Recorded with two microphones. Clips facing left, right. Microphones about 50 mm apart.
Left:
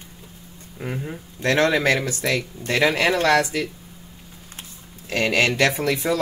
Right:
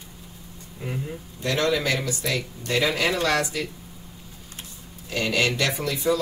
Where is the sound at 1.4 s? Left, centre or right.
Left.